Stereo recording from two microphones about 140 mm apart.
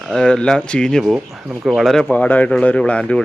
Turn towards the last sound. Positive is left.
turn(degrees=5)  # may be behind; listen again after turning